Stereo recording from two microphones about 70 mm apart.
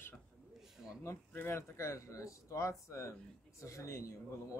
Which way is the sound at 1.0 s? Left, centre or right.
Left.